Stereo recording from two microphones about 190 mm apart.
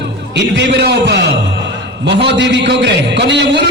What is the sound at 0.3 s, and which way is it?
A man's voice, 65° right (ahead or behind).